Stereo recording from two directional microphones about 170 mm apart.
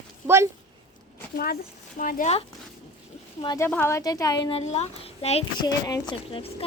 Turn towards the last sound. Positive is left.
turn(degrees=30)  # may be behind; listen again after turning